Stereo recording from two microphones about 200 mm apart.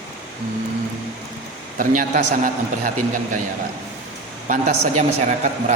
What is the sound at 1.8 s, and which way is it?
A man's voice, 40° right (ahead or behind).